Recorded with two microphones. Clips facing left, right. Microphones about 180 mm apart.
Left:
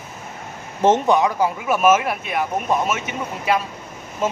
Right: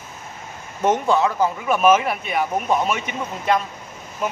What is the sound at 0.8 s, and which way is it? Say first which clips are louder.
Speech: left 2 dB; 20° left (ahead or behind).